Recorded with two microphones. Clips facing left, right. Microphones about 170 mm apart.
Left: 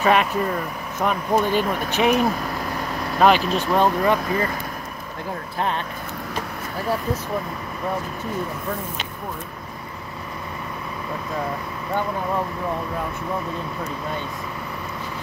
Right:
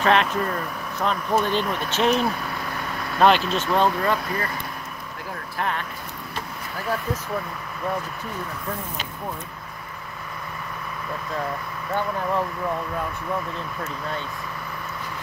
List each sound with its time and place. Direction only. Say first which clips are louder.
0.0 s speech: left 1 dB; 10° left (ahead or behind)
5.6 s speech: left 2 dB; 25° left (ahead or behind)